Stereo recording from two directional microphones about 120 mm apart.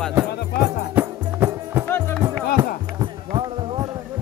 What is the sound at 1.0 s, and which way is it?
Music, 15° right (ahead or behind).